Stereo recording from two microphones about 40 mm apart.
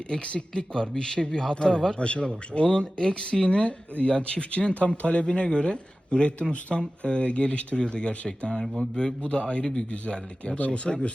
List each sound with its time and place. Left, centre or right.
0.1 s speech: left
2.0 s speech: left